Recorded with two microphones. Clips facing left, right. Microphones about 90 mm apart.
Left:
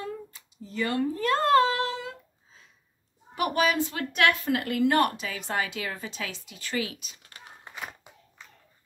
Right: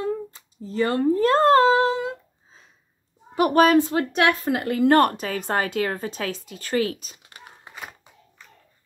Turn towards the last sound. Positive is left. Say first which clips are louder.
# even
turn(degrees=-5)  # may be behind; listen again after turning